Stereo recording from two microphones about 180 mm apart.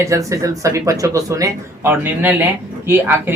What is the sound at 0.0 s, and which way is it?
Speech, 15° right (ahead or behind).